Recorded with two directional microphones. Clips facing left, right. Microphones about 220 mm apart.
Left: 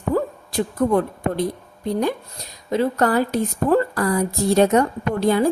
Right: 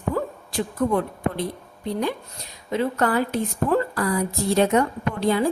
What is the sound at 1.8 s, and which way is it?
A woman's voice, 45° left (ahead or behind).